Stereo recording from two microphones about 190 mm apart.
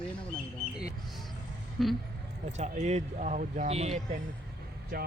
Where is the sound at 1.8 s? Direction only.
Centre (ahead or behind).